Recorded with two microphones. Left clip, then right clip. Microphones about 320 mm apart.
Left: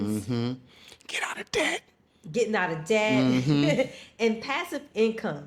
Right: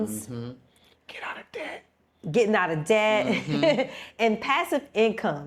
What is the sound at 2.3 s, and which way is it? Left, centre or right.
A woman's voice, right.